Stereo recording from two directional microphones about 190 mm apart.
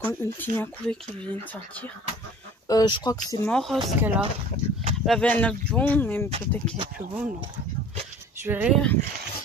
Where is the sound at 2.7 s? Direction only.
20° left (ahead or behind).